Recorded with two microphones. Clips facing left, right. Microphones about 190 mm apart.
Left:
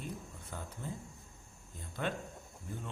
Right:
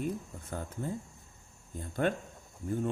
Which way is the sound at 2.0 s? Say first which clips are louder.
Right 7 dB; 50° right (ahead or behind).